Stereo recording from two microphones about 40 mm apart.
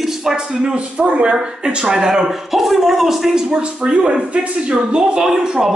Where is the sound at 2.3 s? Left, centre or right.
Centre.